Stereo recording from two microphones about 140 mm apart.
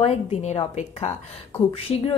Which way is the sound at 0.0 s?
45° left (ahead or behind).